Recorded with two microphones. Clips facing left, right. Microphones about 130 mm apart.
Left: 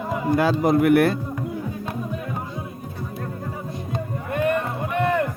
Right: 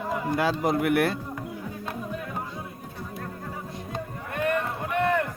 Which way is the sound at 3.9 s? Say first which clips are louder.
Left 7 dB; 10° left (ahead or behind).